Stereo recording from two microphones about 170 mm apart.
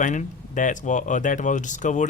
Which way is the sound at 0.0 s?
50° left (ahead or behind).